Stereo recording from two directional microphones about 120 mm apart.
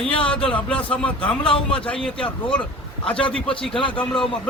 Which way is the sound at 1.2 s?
45° left (ahead or behind).